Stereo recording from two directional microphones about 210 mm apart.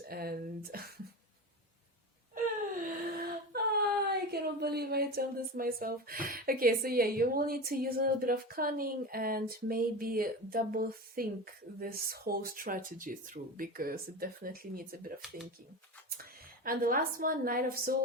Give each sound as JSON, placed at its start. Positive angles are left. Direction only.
{"t": 0.0, "sound": "speech", "side_deg": -45}
{"t": 3.2, "sound": "speech", "side_deg": -45}
{"t": 16.6, "sound": "speech", "side_deg": -40}